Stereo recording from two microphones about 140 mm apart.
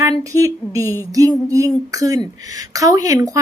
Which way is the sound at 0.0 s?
25° right (ahead or behind).